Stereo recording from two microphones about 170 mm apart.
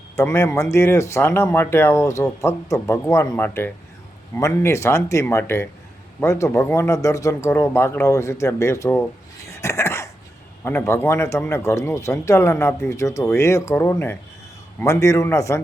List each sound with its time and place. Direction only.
0.2 s a man's voice: 15° left (ahead or behind)
9.5 s a sound: 15° left (ahead or behind)
10.6 s a man's voice: 15° left (ahead or behind)